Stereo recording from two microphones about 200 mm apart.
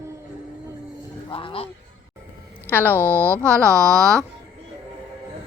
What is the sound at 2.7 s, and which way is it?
Speech, 10° left (ahead or behind).